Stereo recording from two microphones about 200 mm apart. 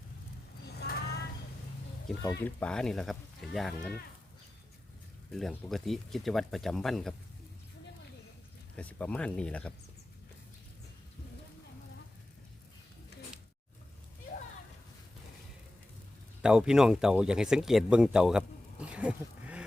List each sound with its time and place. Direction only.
0.8 s a sound: 55° left (ahead or behind)
2.4 s speech: 5° left (ahead or behind)
5.3 s speech: centre (ahead or behind)
8.7 s speech: 5° left (ahead or behind)
16.4 s speech: 5° right (ahead or behind)